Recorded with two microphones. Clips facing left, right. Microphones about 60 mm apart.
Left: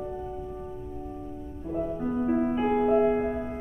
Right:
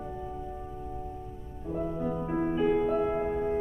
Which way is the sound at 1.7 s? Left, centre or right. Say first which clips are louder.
Left 2 dB; centre.